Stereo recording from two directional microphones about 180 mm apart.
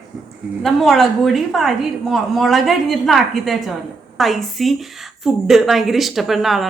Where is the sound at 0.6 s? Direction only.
Centre (ahead or behind).